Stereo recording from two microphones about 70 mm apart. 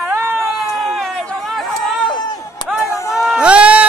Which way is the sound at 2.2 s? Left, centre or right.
Left.